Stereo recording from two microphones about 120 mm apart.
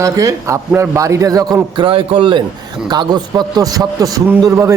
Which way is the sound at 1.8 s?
45° right (ahead or behind).